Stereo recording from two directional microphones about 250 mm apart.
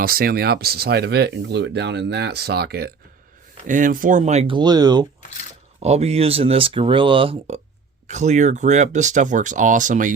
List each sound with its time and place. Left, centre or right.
0.0 s speech: right